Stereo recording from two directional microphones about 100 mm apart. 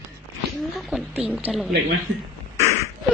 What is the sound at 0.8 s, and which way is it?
Speech, centre (ahead or behind).